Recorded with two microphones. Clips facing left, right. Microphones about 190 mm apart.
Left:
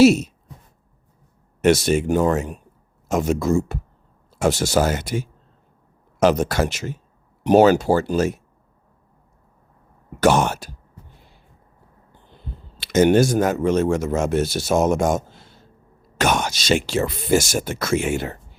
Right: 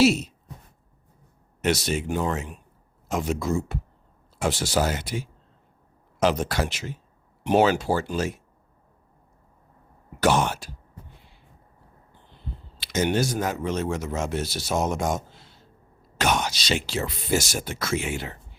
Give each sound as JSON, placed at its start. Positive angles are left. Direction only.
{"t": 0.0, "sound": "speech", "side_deg": 45}
{"t": 1.6, "sound": "speech", "side_deg": 50}
{"t": 10.2, "sound": "speech", "side_deg": 45}
{"t": 12.7, "sound": "speech", "side_deg": 50}